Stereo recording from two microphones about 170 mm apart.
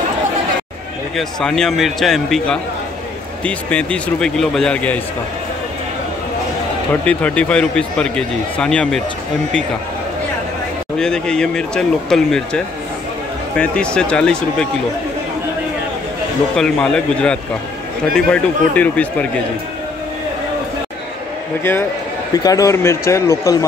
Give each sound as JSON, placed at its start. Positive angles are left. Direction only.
{"t": 1.1, "sound": "speech", "side_deg": 5}
{"t": 7.1, "sound": "speech", "side_deg": 5}
{"t": 11.0, "sound": "speech", "side_deg": 5}
{"t": 16.5, "sound": "speech", "side_deg": 5}
{"t": 22.3, "sound": "speech", "side_deg": 20}